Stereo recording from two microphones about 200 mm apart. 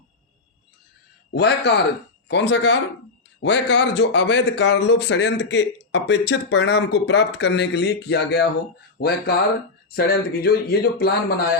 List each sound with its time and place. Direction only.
1.3 s speech: 55° left (ahead or behind)